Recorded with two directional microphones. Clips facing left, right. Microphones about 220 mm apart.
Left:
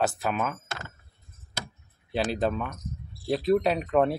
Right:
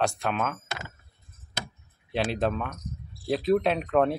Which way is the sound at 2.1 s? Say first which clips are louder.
Even; centre (ahead or behind).